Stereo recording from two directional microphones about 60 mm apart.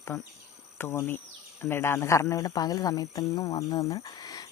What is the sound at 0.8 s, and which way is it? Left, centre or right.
Speech, left.